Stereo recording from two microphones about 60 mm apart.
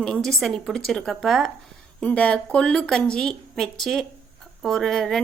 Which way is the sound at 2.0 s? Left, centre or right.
Left.